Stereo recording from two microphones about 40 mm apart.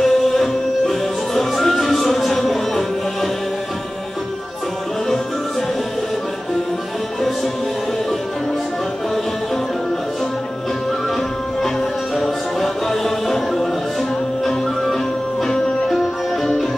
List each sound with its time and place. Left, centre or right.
0.0 s music: centre
12.2 s music: centre
15.4 s music: centre